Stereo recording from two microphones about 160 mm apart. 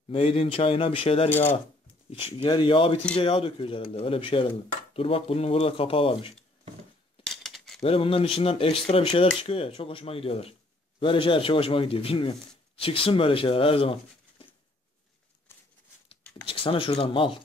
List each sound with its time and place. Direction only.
0.1 s speech: 35° left (ahead or behind)
7.4 s cutlery: centre (ahead or behind)
7.8 s speech: 35° left (ahead or behind)
15.5 s a sound: 15° left (ahead or behind)
16.4 s speech: 35° left (ahead or behind)